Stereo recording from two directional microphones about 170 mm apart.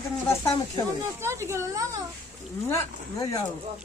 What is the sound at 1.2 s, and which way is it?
Speech, 15° right (ahead or behind).